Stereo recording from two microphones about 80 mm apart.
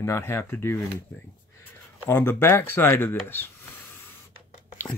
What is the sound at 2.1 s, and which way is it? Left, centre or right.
Speech, left.